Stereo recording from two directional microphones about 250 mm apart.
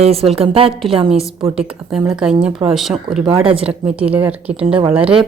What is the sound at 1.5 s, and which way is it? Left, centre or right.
A woman's voice, centre.